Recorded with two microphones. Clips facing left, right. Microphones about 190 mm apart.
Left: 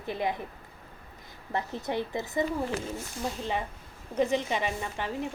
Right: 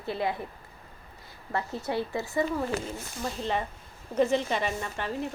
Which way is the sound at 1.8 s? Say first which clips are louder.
Right 1 dB; 20° left (ahead or behind).